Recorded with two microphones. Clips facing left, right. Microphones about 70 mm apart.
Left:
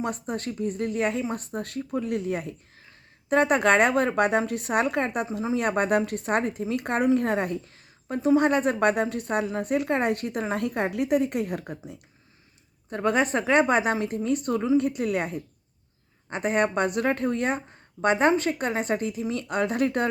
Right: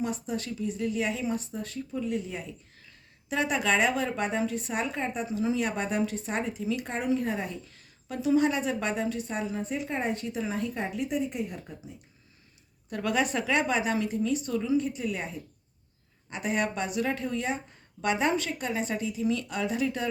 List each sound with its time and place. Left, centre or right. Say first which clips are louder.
0.0 s a woman's voice: left 2 dB; left
2.8 s a woman's voice: left 3 dB; left
7.7 s a sound: left 6 dB; left
8.4 s a woman's voice: left 4 dB; left
12.9 s a woman's voice: left 4 dB; left
16.3 s a woman's voice: left 5 dB; left